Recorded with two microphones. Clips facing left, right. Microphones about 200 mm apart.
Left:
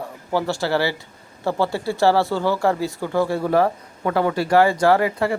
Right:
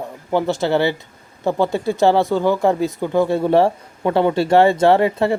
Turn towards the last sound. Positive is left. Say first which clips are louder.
# right 3 dB
turn(degrees=-25)  # may be behind; listen again after turning